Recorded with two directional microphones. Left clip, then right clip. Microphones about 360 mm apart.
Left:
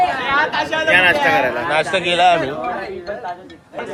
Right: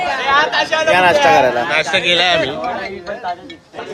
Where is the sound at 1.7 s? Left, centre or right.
Centre.